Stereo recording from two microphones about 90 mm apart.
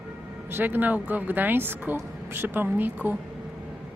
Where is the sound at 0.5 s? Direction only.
20° right (ahead or behind).